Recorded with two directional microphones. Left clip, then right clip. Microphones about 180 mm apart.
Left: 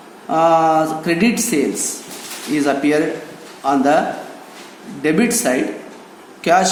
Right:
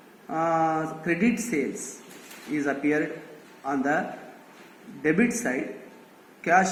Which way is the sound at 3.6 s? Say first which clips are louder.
Left 12 dB; 40° left (ahead or behind).